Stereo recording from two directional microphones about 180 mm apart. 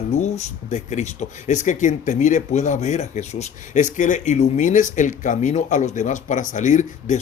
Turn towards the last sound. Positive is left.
turn(degrees=45)  # may be behind; listen again after turning